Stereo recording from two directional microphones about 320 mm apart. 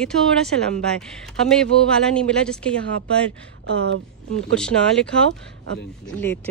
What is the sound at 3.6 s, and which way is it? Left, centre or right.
Speech, right.